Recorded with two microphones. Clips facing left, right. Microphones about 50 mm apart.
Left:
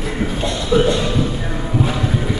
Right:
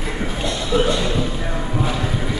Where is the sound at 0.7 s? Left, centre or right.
Centre.